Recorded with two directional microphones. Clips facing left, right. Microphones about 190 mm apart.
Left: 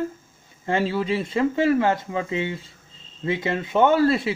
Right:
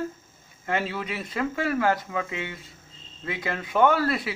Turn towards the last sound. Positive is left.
turn(degrees=25)  # may be behind; listen again after turning